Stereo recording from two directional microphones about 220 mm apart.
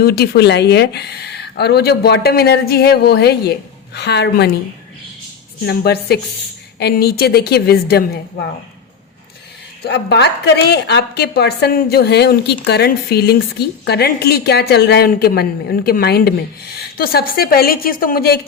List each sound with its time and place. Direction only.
0.0 s a woman's voice: 45° left (ahead or behind)
5.6 s a woman's voice: 45° left (ahead or behind)
9.8 s a woman's voice: 50° left (ahead or behind)